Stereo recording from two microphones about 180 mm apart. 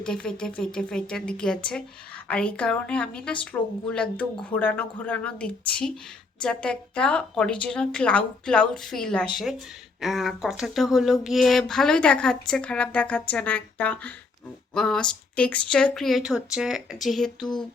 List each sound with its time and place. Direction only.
0.0 s a woman's voice: 5° left (ahead or behind)
17.4 s speech: 25° left (ahead or behind)